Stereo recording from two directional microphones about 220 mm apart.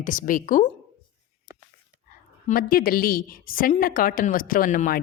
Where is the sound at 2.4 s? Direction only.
40° left (ahead or behind).